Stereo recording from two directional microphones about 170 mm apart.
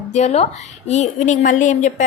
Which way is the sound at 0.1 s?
40° left (ahead or behind).